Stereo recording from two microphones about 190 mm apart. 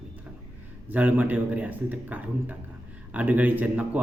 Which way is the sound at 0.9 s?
10° right (ahead or behind).